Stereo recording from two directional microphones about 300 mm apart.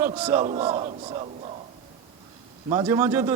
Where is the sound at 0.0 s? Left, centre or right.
Centre.